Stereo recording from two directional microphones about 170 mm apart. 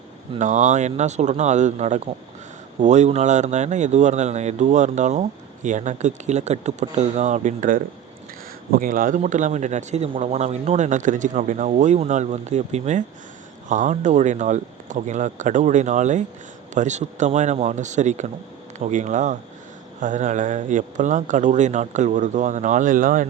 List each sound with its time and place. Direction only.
0.3 s speech: 45° right (ahead or behind)